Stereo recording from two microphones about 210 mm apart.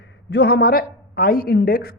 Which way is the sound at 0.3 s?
50° left (ahead or behind).